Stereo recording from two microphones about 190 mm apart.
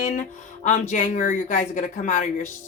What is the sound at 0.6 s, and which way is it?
Speech, 40° left (ahead or behind).